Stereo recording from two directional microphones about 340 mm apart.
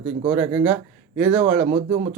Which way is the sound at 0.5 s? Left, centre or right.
Centre.